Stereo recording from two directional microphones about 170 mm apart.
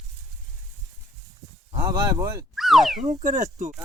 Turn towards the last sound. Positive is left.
turn(degrees=-45)  # may be behind; listen again after turning